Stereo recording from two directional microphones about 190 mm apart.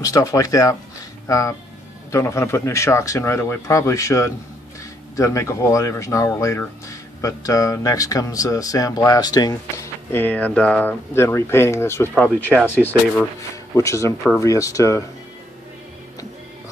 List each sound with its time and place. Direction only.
0.0 s speech: 20° left (ahead or behind)
13.7 s speech: 15° left (ahead or behind)